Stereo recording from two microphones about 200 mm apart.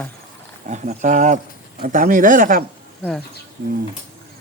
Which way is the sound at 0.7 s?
35° right (ahead or behind).